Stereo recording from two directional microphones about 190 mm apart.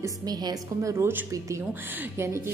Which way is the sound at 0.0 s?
20° right (ahead or behind).